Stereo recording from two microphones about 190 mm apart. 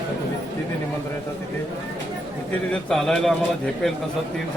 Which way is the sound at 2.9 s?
Centre (ahead or behind).